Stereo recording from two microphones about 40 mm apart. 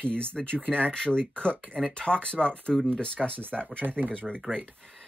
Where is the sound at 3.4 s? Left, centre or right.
Right.